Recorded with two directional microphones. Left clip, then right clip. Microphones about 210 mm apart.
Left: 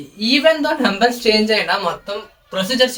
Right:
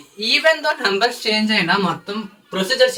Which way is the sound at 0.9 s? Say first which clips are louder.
Left 3 dB; 5° left (ahead or behind).